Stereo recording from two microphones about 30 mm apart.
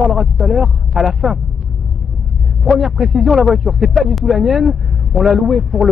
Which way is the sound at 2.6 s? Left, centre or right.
Centre.